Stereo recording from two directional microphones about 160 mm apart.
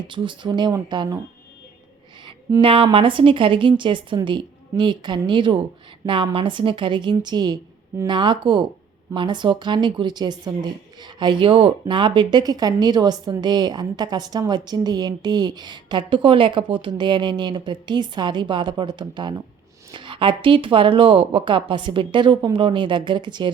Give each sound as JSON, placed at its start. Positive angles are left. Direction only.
{"t": 0.1, "sound": "speech", "side_deg": -30}
{"t": 2.2, "sound": "speech", "side_deg": -30}